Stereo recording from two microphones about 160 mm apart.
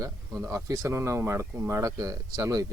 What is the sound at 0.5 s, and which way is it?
Speech, 20° right (ahead or behind).